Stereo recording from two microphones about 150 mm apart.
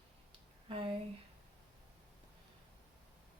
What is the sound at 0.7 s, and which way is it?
Speech, 40° right (ahead or behind).